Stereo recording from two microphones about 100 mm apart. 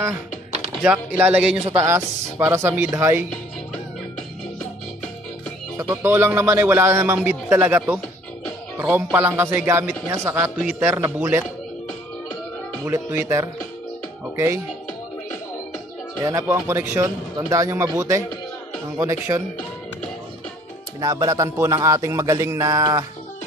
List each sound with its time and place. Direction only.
0.8 s a man's voice: 15° right (ahead or behind)
1.8 s a man's voice: 25° right (ahead or behind)
5.8 s a man's voice: 25° right (ahead or behind)
7.6 s a man's voice: 15° right (ahead or behind)
12.9 s a man's voice: 25° right (ahead or behind)
16.3 s a man's voice: 30° right (ahead or behind)
21.0 s a man's voice: 35° right (ahead or behind)